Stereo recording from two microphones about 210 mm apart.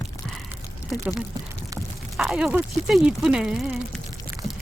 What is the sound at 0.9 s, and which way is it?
Speech, 5° right (ahead or behind).